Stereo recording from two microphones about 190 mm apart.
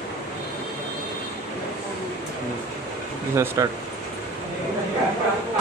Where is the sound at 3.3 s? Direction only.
15° right (ahead or behind).